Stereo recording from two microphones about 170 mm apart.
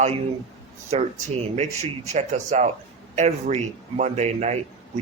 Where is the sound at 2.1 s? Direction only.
45° right (ahead or behind).